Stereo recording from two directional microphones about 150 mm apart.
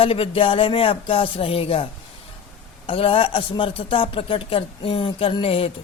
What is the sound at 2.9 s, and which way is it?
A woman's voice, 40° left (ahead or behind).